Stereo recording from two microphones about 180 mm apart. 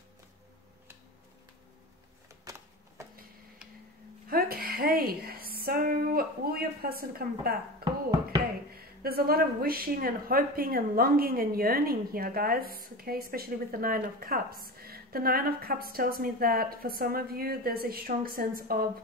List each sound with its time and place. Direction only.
4.3 s a sound: 55° right (ahead or behind)
7.8 s music: 55° right (ahead or behind)
8.7 s a woman's voice: 55° right (ahead or behind)